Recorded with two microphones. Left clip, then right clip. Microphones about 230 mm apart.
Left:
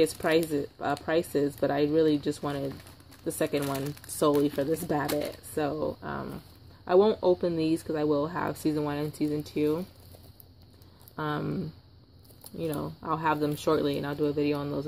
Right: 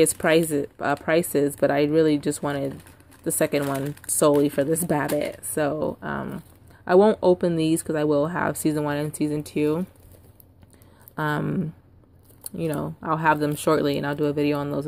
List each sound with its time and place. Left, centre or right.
0.0 s speech: right
11.1 s speech: right